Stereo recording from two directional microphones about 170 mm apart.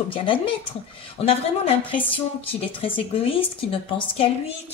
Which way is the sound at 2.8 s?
30° left (ahead or behind).